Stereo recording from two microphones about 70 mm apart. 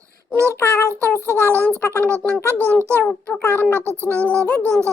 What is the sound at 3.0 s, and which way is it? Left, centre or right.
Speech, centre.